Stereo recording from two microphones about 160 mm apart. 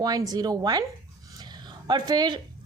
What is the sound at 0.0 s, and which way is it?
Speech, 25° right (ahead or behind).